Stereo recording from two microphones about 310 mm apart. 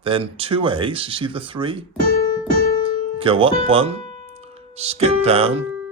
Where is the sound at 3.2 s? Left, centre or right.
Centre.